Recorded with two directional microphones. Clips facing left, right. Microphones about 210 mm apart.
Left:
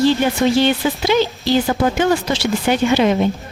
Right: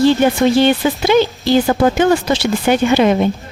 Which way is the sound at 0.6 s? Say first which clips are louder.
Right 3 dB; 50° right (ahead or behind).